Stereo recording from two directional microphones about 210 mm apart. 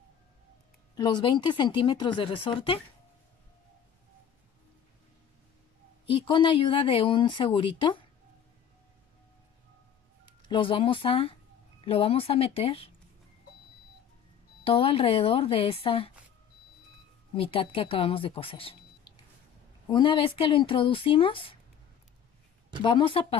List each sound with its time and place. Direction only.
0.9 s speech: 20° left (ahead or behind)
6.0 s speech: 25° left (ahead or behind)
10.5 s speech: 25° left (ahead or behind)
14.6 s speech: 25° left (ahead or behind)
17.3 s speech: 25° left (ahead or behind)
19.9 s speech: 25° left (ahead or behind)
22.8 s speech: 25° left (ahead or behind)